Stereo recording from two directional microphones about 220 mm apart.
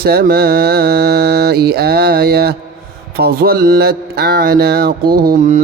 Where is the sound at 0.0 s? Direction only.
45° right (ahead or behind).